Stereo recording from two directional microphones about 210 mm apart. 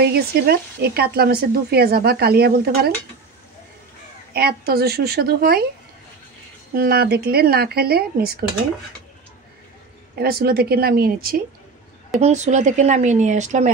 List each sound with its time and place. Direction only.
0.0 s speech: 50° right (ahead or behind)
4.3 s speech: 50° right (ahead or behind)
6.7 s speech: 45° right (ahead or behind)
10.1 s speech: 45° right (ahead or behind)
12.2 s speech: 35° right (ahead or behind)